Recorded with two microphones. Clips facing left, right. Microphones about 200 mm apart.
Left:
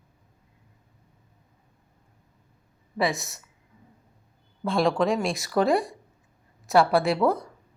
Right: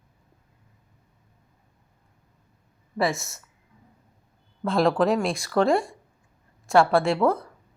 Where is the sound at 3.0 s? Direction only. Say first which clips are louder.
Right 1 dB; centre (ahead or behind).